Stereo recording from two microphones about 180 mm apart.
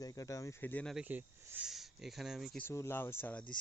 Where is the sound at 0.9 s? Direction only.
10° right (ahead or behind).